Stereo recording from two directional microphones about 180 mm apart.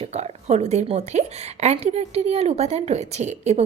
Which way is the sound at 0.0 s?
35° right (ahead or behind).